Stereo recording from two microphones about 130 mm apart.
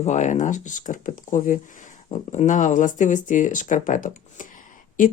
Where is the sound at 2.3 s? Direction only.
75° left (ahead or behind).